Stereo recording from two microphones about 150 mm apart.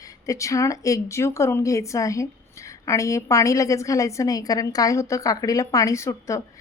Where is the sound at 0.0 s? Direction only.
20° left (ahead or behind).